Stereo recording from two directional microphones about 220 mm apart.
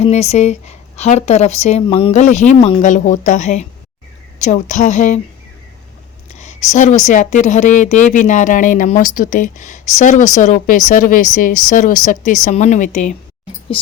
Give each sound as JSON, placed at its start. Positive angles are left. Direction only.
{"t": 0.0, "sound": "speech", "side_deg": 30}
{"t": 6.4, "sound": "speech", "side_deg": 30}